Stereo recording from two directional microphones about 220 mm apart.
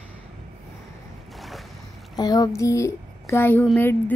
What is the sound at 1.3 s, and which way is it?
Boat, centre (ahead or behind).